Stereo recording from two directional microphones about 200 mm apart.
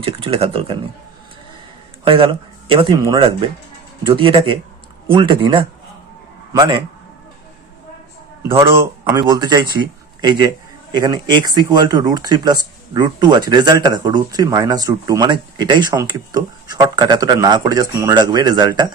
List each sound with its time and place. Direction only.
0.0 s speech: 25° right (ahead or behind)
2.0 s speech: 25° right (ahead or behind)
8.4 s speech: 10° right (ahead or behind)